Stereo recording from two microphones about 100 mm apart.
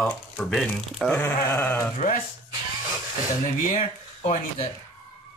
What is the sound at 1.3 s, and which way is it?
Sheep, 40° left (ahead or behind).